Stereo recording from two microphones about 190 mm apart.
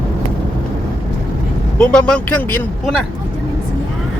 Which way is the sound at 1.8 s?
5° left (ahead or behind).